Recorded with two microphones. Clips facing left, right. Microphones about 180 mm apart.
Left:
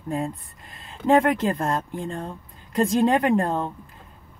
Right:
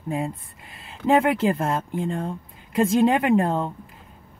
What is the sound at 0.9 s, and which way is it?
Speech, 5° right (ahead or behind).